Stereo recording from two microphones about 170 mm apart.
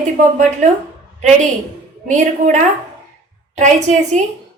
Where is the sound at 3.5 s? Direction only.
45° right (ahead or behind).